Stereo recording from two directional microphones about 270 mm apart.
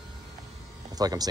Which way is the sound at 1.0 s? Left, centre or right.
Centre.